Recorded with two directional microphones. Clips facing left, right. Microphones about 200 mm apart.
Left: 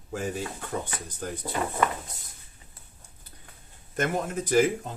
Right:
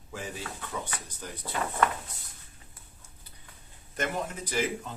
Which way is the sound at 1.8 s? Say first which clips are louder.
Even; 10° left (ahead or behind).